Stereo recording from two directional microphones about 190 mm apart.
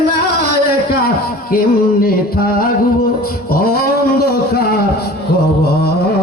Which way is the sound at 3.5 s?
50° left (ahead or behind).